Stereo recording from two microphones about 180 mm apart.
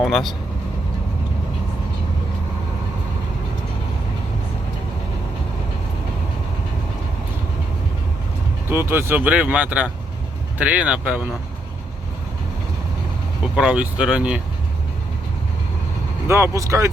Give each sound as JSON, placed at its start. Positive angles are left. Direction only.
{"t": 0.0, "sound": "speech", "side_deg": 0}
{"t": 8.7, "sound": "speech", "side_deg": -10}
{"t": 13.6, "sound": "speech", "side_deg": -5}
{"t": 16.3, "sound": "speech", "side_deg": -15}